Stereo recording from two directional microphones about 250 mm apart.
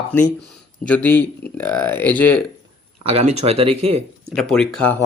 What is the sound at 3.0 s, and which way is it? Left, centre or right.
Speech, right.